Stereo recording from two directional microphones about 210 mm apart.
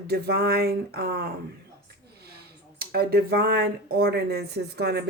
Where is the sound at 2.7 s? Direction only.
45° right (ahead or behind).